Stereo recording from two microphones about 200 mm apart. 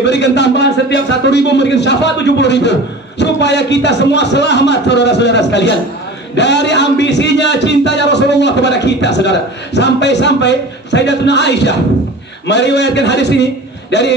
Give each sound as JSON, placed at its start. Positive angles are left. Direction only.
{"t": 0.0, "sound": "a man's voice", "side_deg": 60}